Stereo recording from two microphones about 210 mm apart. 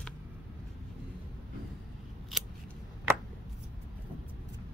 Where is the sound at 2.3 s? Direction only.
Centre (ahead or behind).